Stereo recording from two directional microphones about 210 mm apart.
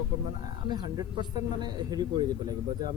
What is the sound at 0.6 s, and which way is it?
Speech, 20° right (ahead or behind).